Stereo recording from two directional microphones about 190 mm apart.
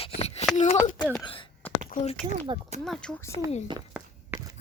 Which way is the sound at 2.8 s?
5° left (ahead or behind).